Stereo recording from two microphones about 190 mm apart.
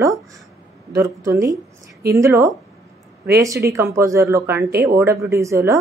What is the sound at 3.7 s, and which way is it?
Speech, 15° right (ahead or behind).